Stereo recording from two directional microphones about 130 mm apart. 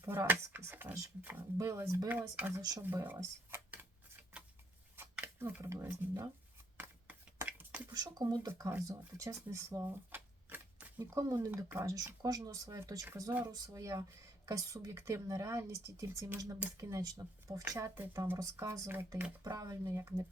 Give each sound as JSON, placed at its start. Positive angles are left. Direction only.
{"t": 0.0, "sound": "speech", "side_deg": -20}
{"t": 2.0, "sound": "speech", "side_deg": -10}
{"t": 2.6, "sound": "speech", "side_deg": -30}
{"t": 2.8, "sound": "speech", "side_deg": -15}
{"t": 4.9, "sound": "scissors", "side_deg": -15}
{"t": 6.7, "sound": "a sound", "side_deg": -15}
{"t": 7.9, "sound": "speech", "side_deg": -30}
{"t": 9.1, "sound": "typewriter", "side_deg": -25}
{"t": 11.0, "sound": "speech", "side_deg": -25}
{"t": 19.5, "sound": "speech", "side_deg": -25}